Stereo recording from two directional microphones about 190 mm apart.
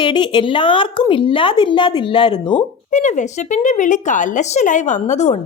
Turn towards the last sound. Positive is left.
turn(degrees=40)  # may be behind; listen again after turning